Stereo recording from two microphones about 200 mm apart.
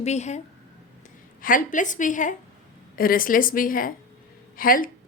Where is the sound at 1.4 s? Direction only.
40° left (ahead or behind).